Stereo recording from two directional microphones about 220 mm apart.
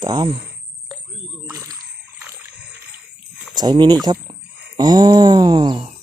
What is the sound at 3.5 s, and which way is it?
Speech, 20° right (ahead or behind).